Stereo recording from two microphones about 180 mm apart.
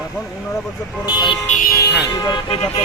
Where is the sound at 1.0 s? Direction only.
25° left (ahead or behind).